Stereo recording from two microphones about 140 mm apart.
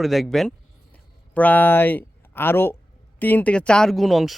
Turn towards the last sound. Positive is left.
turn(degrees=0)  # may be behind; listen again after turning